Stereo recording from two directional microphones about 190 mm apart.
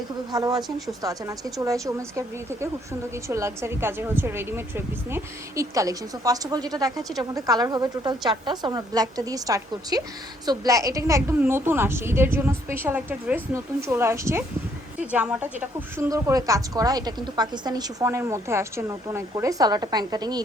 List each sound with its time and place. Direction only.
0.3 s a woman's voice: 20° right (ahead or behind)